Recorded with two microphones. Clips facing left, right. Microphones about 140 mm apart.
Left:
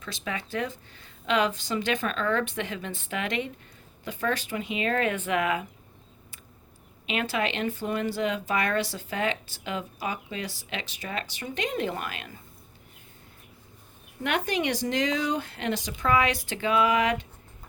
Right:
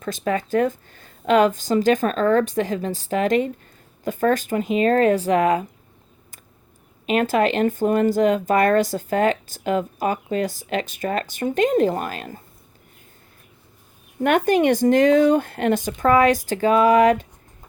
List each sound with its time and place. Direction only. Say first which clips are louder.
0.0 s speech: right 11 dB; 45° right (ahead or behind)
7.1 s speech: right 10 dB; 45° right (ahead or behind)
14.3 s speech: right 10 dB; 50° right (ahead or behind)